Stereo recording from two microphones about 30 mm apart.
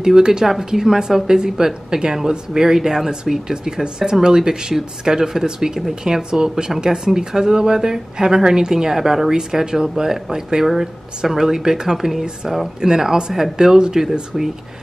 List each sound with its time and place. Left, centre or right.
0.0 s speech: right; by 12.6 s centre
12.8 s speech: centre
14.3 s speech: centre